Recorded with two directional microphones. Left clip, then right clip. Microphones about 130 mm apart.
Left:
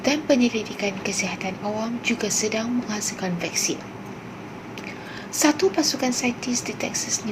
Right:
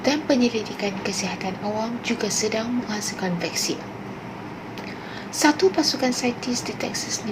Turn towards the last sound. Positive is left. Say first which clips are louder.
# left 1 dB
turn(degrees=15)  # may be behind; listen again after turning